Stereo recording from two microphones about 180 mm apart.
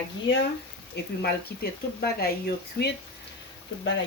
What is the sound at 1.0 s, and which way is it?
Speech, 65° left (ahead or behind).